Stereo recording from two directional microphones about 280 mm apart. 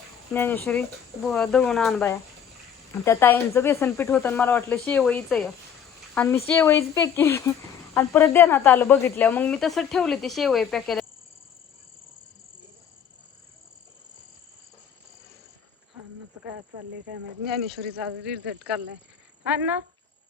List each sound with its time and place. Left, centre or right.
0.3 s speech: centre
17.7 s speech: right
18.3 s speech: centre